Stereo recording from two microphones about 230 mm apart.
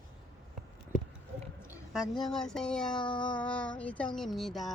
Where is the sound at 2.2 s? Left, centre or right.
Centre.